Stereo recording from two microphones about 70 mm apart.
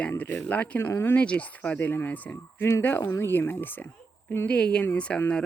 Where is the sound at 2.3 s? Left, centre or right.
Left.